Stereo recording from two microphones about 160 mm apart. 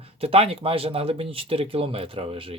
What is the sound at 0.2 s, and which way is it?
Speech, 35° right (ahead or behind).